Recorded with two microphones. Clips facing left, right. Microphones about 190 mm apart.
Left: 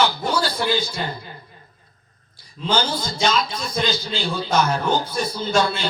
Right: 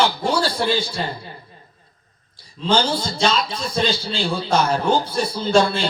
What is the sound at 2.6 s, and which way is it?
A man's voice, 30° right (ahead or behind).